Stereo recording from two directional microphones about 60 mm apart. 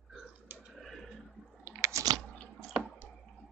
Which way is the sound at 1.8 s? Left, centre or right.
Right.